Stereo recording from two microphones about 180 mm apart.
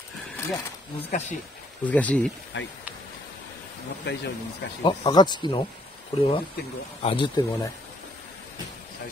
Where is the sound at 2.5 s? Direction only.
85° left.